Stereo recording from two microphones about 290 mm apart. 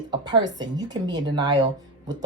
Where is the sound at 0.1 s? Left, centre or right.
Centre.